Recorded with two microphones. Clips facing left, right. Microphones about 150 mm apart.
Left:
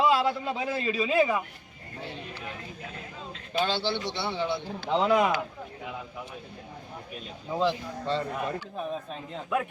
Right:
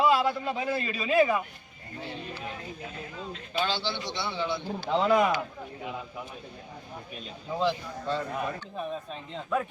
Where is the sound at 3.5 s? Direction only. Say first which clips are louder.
Left 3 dB; 50° left (ahead or behind).